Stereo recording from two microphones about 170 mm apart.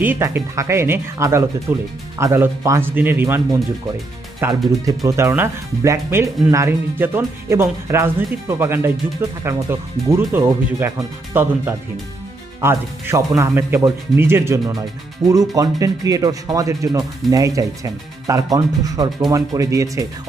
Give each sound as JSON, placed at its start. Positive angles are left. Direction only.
{"t": 0.0, "sound": "speech", "side_deg": -10}
{"t": 4.4, "sound": "speech", "side_deg": -15}
{"t": 12.5, "sound": "speech", "side_deg": -15}